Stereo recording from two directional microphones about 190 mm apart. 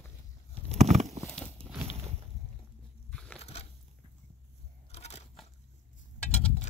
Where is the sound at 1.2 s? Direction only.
5° left (ahead or behind).